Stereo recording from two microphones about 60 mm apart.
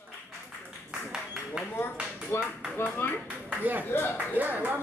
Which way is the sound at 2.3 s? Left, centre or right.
Left.